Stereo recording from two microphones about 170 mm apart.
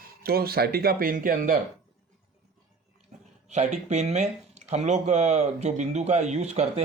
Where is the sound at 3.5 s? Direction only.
45° right (ahead or behind).